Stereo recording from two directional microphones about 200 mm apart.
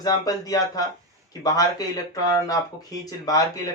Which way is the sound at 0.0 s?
20° left (ahead or behind).